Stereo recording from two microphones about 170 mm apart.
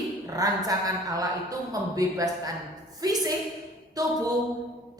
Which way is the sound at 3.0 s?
20° right (ahead or behind).